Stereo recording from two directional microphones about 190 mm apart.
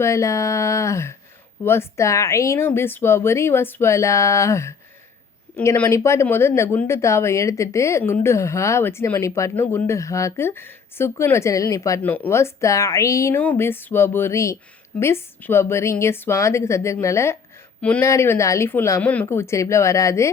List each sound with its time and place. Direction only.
0.0 s speech: 15° left (ahead or behind)